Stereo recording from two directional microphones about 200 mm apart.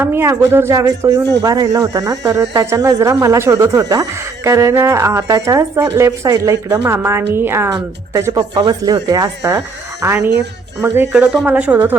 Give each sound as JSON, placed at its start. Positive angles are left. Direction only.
{"t": 0.0, "sound": "speech", "side_deg": -10}